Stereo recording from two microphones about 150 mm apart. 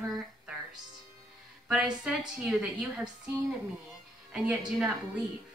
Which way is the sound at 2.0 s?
5° right (ahead or behind).